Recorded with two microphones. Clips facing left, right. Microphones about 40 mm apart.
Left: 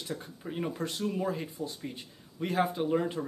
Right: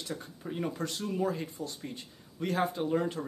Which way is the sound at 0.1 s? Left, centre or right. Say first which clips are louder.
Left 1 dB; centre.